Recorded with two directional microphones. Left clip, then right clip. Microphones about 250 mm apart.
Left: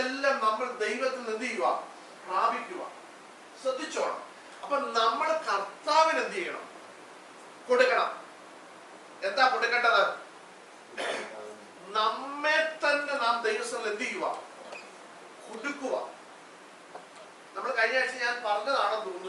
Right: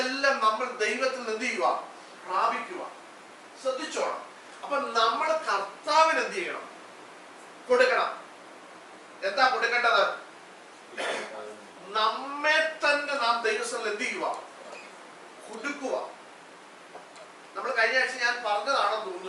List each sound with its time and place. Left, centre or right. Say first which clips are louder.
0.0 s a sound: right 2 dB; centre
2.2 s a man's voice: right 1 dB; centre
7.7 s a man's voice: right 1 dB; centre
9.2 s a man's voice: right 1 dB; centre
15.8 s speech: right 1 dB; centre
17.6 s a man's voice: right 2 dB; centre